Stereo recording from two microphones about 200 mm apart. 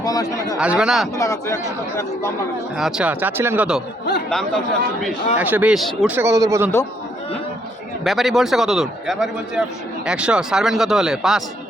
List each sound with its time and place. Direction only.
0.0 s speech: 20° left (ahead or behind)
0.6 s a man's voice: 5° right (ahead or behind)
1.1 s speech: 15° left (ahead or behind)
2.7 s a man's voice: 5° right (ahead or behind)
6.1 s speech: 15° right (ahead or behind)
8.0 s a man's voice: centre (ahead or behind)